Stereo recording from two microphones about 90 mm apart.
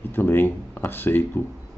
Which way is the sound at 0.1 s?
25° left (ahead or behind).